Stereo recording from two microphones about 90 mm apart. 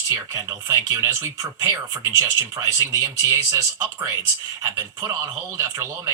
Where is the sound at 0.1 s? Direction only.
35° right (ahead or behind).